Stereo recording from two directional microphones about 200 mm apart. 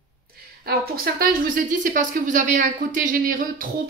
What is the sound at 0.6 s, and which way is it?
A woman's voice, 50° right (ahead or behind).